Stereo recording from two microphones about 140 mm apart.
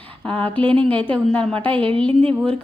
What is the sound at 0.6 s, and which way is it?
Speech, 40° right (ahead or behind).